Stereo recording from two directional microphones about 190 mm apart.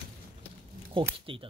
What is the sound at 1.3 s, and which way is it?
Speech, 25° right (ahead or behind).